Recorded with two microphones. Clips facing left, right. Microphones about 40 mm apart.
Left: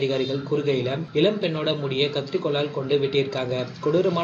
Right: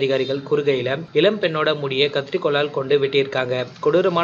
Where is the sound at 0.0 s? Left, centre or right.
Right.